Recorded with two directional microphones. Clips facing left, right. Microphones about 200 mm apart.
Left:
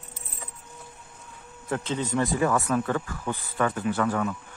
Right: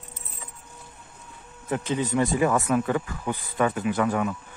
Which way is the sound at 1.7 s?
15° right (ahead or behind).